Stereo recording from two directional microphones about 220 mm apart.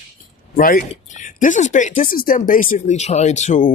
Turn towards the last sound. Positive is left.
turn(degrees=35)  # may be behind; listen again after turning